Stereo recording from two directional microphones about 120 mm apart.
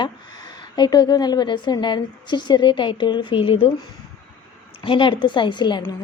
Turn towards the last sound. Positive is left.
turn(degrees=40)  # may be behind; listen again after turning